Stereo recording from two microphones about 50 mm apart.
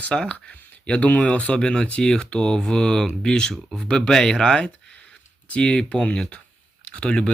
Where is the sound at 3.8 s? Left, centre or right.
Centre.